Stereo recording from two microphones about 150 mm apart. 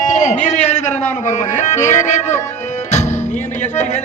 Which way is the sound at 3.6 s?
50° left (ahead or behind).